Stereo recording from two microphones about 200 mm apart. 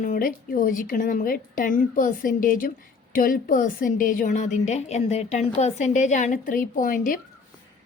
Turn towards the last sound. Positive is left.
turn(degrees=40)  # may be behind; listen again after turning